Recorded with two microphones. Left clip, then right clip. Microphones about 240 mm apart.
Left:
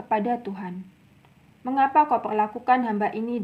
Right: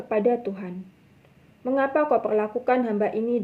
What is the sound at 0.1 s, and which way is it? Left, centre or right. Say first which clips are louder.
Speech: right 2 dB; left.